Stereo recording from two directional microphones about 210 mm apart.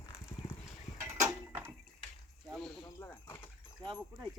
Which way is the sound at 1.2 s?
10° right (ahead or behind).